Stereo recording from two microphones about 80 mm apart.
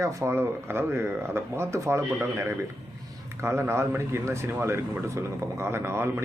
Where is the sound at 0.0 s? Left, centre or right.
Right.